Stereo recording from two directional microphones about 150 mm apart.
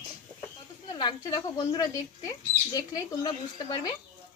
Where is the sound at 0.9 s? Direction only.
30° left (ahead or behind).